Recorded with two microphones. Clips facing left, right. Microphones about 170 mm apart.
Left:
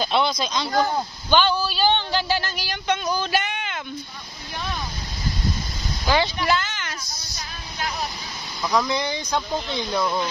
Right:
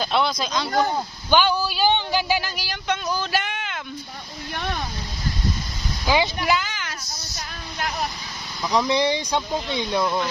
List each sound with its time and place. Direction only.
0.0 s speech: centre (ahead or behind)
6.0 s speech: 10° right (ahead or behind)
8.8 s speech: 25° right (ahead or behind)
9.5 s speech: 10° right (ahead or behind)